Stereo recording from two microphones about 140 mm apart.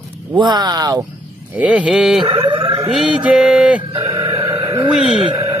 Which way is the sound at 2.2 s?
35° right (ahead or behind).